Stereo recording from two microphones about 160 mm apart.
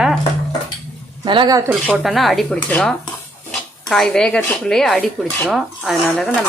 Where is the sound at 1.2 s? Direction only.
30° right (ahead or behind).